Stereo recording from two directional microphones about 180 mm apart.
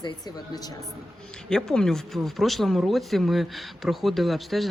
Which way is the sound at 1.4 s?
5° left (ahead or behind).